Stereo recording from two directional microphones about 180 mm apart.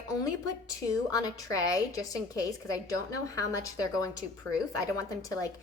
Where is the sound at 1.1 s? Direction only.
20° left (ahead or behind).